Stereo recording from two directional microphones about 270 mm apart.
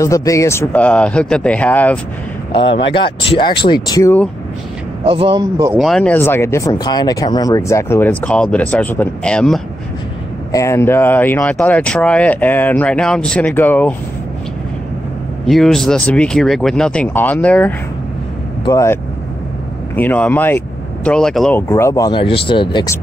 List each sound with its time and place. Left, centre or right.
0.0 s speech: centre
2.5 s speech: centre
5.0 s speech: centre
5.8 s speech: centre
15.4 s speech: centre
20.0 s speech: centre